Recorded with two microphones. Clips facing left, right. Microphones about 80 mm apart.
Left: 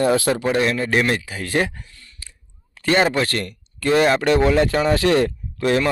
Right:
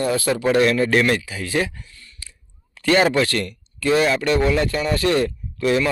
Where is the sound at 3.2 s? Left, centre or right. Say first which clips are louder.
Right 2 dB; left.